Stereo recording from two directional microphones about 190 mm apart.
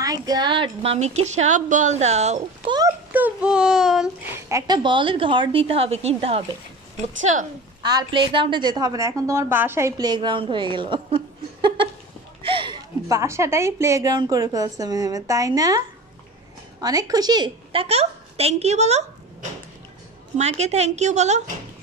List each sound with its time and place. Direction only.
0.0 s a woman's voice: 20° right (ahead or behind); by 2.7 s 35° right (ahead or behind)
3.1 s a sound: 10° right (ahead or behind)
4.5 s a woman's voice: 20° right (ahead or behind); by 7.4 s 40° right (ahead or behind)
7.8 s a woman's voice: 20° right (ahead or behind)
16.8 s a woman's voice: 20° right (ahead or behind); by 19.0 s 35° right (ahead or behind)
20.3 s a woman's voice: 35° right (ahead or behind)